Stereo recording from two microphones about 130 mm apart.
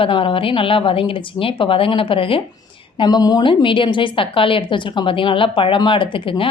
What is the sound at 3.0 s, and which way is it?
A woman's voice, 35° left (ahead or behind).